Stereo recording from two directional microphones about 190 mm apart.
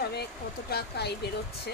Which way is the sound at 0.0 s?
55° left (ahead or behind).